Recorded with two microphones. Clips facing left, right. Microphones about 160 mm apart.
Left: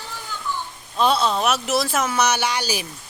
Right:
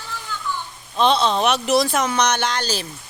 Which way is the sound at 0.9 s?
5° left (ahead or behind).